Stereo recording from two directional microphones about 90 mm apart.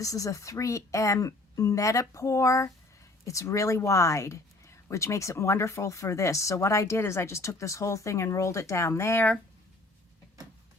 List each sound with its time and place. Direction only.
0.0 s speech: 40° left (ahead or behind)